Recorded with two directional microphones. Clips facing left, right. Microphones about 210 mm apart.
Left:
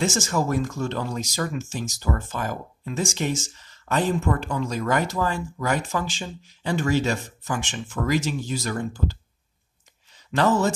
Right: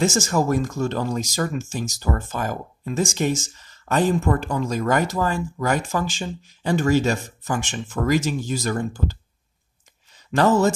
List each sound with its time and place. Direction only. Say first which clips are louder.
0.0 s speech: right 3 dB; 45° right (ahead or behind)
10.3 s speech: right 3 dB; 45° right (ahead or behind)